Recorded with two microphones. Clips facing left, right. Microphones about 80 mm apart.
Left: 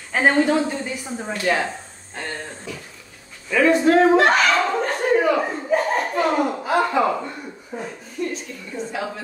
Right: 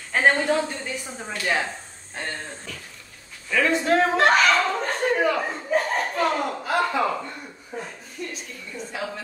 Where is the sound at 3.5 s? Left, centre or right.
Centre.